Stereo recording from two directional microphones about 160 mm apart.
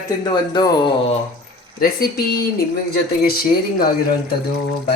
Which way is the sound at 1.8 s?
70° left (ahead or behind).